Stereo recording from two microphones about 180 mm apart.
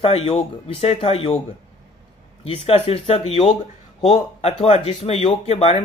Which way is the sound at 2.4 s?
35° left (ahead or behind).